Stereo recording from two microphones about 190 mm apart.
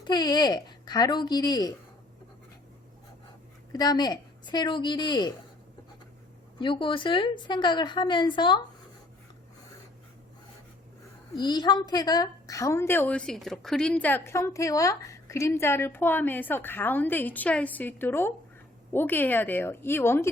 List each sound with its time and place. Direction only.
0.0 s a woman's voice: 20° left (ahead or behind)
3.7 s a woman's voice: 20° left (ahead or behind)
6.6 s a woman's voice: 25° left (ahead or behind)
11.3 s a woman's voice: 20° left (ahead or behind)